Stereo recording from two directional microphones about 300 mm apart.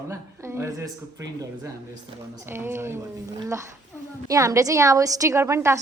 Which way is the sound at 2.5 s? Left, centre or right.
Centre.